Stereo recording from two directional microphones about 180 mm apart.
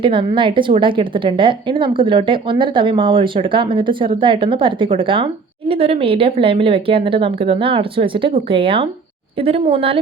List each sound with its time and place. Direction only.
0.0 s a woman's voice: 30° right (ahead or behind)